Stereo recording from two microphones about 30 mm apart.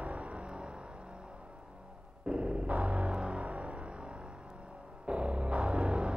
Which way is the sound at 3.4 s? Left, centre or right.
Right.